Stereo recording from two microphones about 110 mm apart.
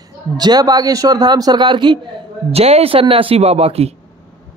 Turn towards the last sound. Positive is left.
turn(degrees=-65)  # may be behind; listen again after turning